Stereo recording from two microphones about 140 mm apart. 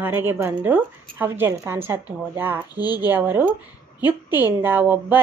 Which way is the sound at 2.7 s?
30° left (ahead or behind).